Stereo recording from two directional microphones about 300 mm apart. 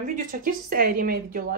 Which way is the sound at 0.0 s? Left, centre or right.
Right.